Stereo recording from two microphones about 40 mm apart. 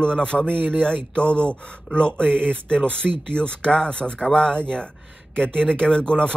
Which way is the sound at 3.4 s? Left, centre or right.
Left.